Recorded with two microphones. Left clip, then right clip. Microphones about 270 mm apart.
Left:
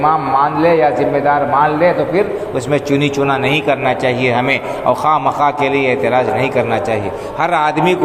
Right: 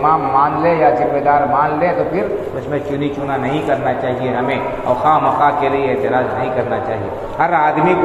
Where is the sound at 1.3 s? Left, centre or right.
Left.